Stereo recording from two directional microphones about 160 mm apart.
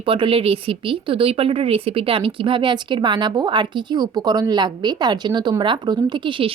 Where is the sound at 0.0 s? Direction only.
35° right (ahead or behind).